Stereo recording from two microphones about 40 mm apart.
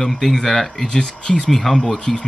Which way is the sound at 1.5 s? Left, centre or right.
Centre.